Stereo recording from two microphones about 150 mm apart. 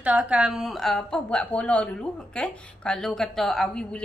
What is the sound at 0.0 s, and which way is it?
A woman's voice, 10° right (ahead or behind).